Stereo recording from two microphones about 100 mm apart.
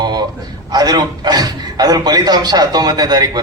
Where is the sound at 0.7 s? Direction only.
45° right (ahead or behind).